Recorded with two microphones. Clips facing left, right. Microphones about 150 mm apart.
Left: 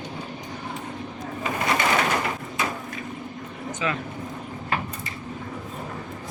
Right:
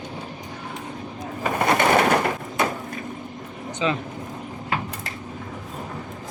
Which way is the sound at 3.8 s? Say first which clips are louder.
Right 4 dB; 25° right (ahead or behind).